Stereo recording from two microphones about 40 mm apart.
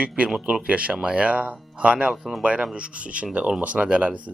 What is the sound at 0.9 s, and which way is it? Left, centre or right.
Speech, right.